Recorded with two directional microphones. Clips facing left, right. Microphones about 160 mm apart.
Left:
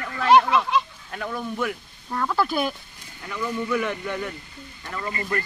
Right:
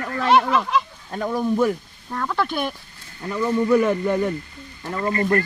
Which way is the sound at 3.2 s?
35° right (ahead or behind).